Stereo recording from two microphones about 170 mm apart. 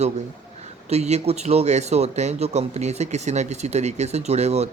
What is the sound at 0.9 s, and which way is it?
A man's voice, 40° right (ahead or behind).